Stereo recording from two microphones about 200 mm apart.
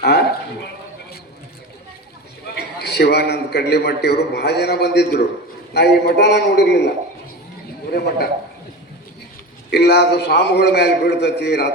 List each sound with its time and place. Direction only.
2.6 s a man's voice: 55° left (ahead or behind)
9.6 s a man's voice: 55° left (ahead or behind)